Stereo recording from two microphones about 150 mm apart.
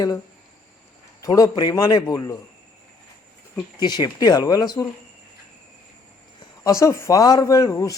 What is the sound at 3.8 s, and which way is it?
Speech, 30° left (ahead or behind).